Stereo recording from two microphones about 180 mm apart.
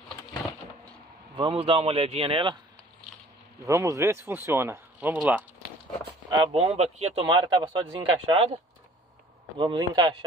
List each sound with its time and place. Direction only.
1.3 s speech: 30° right (ahead or behind)
3.6 s speech: 15° right (ahead or behind)
6.5 s speech: 35° right (ahead or behind)
9.6 s speech: 25° right (ahead or behind)